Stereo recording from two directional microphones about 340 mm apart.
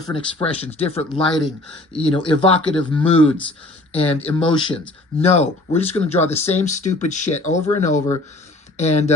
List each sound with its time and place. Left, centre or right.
0.0 s speech: centre